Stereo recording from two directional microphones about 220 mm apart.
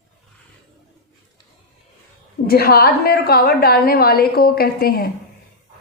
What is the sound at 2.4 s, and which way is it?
A woman's voice, 45° left (ahead or behind).